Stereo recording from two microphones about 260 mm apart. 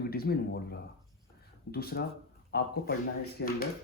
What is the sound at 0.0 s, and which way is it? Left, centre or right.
Speech, left.